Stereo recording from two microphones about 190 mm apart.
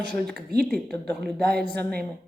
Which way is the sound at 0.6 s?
5° left (ahead or behind).